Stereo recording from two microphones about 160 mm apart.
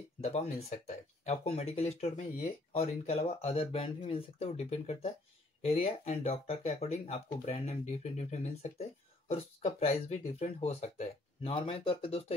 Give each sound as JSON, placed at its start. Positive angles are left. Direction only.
{"t": 0.2, "sound": "speech", "side_deg": 40}